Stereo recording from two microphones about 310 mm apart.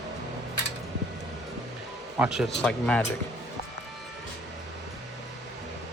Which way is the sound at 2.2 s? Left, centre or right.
Centre.